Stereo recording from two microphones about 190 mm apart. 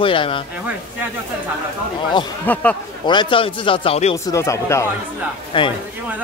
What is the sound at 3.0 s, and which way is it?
Speech, 25° left (ahead or behind).